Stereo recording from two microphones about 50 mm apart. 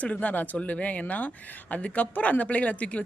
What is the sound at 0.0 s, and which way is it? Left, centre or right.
Speech, left.